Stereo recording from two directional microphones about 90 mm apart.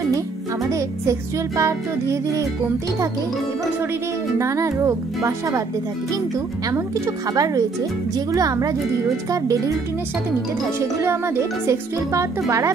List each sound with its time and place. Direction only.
0.7 s speech: 35° right (ahead or behind)
4.4 s speech: 35° right (ahead or behind)
7.3 s speech: 40° right (ahead or behind)
10.8 s speech: 30° right (ahead or behind)